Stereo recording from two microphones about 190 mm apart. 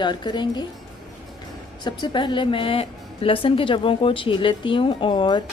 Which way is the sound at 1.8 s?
25° left (ahead or behind).